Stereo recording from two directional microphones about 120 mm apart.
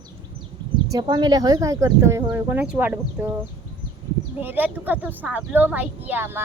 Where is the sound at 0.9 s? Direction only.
35° right (ahead or behind); by 3.3 s 15° right (ahead or behind).